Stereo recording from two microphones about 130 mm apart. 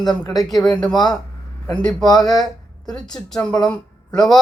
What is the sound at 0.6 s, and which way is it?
Speech, 5° left (ahead or behind).